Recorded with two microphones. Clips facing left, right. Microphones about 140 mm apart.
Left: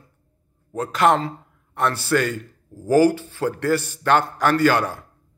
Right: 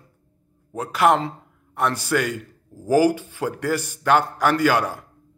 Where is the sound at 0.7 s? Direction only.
10° right (ahead or behind).